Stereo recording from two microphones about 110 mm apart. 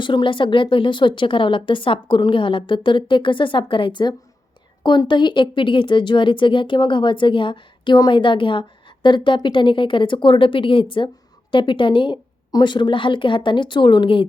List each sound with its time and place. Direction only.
0.0 s a woman's voice: 45° left (ahead or behind)